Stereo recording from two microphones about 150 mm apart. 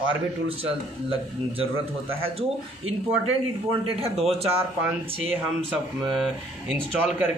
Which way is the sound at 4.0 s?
40° right (ahead or behind).